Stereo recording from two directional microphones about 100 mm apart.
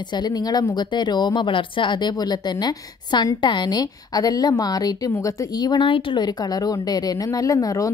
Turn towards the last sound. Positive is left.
turn(degrees=35)  # may be behind; listen again after turning